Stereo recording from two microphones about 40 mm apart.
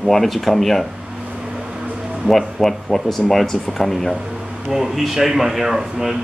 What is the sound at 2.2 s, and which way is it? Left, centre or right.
Speech, centre.